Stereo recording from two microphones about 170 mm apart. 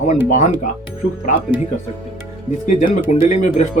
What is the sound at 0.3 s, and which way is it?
Speech, 45° left (ahead or behind).